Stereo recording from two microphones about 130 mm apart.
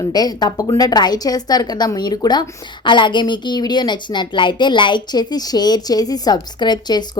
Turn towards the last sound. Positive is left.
turn(degrees=35)  # may be behind; listen again after turning